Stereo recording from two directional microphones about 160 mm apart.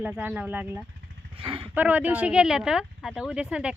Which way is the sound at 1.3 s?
35° right (ahead or behind).